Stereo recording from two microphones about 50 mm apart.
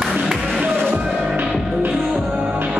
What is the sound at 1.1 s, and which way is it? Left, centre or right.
Music, centre.